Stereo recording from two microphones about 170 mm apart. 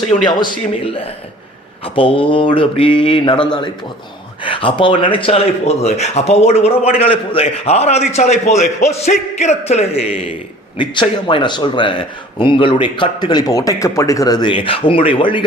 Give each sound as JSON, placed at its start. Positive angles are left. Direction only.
{"t": 0.3, "sound": "speech", "side_deg": 25}
{"t": 10.8, "sound": "speech", "side_deg": 30}